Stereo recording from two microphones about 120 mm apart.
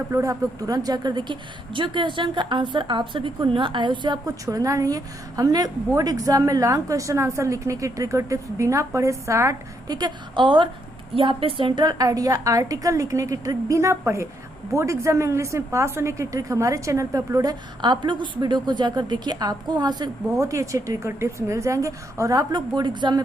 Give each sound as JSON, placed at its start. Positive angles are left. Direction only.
{"t": 0.1, "sound": "a woman's voice", "side_deg": -25}
{"t": 10.0, "sound": "a woman's voice", "side_deg": -40}
{"t": 20.4, "sound": "a woman's voice", "side_deg": -25}